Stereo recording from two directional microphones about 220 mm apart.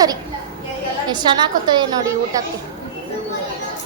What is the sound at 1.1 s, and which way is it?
A woman's voice, 20° right (ahead or behind).